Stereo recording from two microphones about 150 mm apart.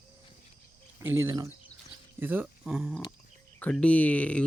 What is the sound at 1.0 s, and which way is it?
Speech, 15° right (ahead or behind).